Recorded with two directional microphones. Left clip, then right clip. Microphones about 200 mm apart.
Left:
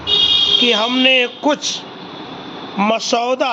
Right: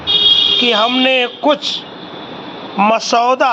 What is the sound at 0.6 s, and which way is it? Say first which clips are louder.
Speech: right 2 dB; 10° left (ahead or behind).